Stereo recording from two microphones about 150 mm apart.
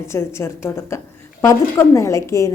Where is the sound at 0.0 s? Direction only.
20° left (ahead or behind).